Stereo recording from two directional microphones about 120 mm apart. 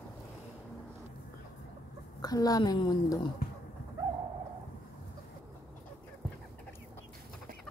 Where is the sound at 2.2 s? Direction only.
30° left (ahead or behind).